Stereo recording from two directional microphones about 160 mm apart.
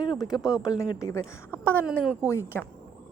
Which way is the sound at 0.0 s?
30° left (ahead or behind).